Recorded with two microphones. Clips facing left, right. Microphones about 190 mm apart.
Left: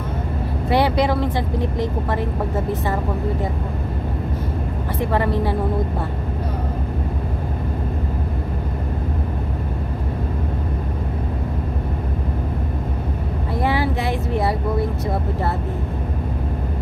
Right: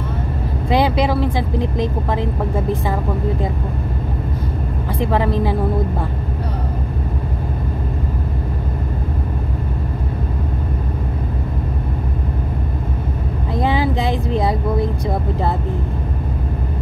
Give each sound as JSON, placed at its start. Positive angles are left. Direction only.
{"t": 0.7, "sound": "speech", "side_deg": -15}
{"t": 13.6, "sound": "vehicle", "side_deg": -20}